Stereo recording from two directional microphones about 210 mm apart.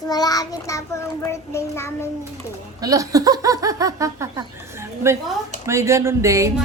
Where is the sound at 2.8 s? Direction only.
15° right (ahead or behind).